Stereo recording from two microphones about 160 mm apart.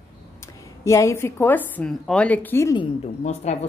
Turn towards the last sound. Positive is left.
turn(degrees=40)  # may be behind; listen again after turning